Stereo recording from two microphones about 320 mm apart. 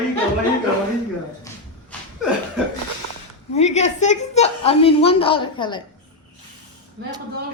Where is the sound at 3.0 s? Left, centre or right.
Right.